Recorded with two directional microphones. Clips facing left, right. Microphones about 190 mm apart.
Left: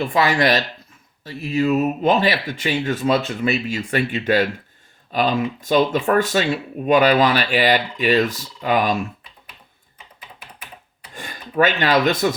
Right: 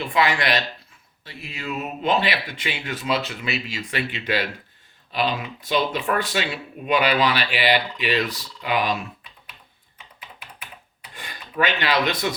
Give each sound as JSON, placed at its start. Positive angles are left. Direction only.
{"t": 0.0, "sound": "speech", "side_deg": 45}
{"t": 11.1, "sound": "speech", "side_deg": 45}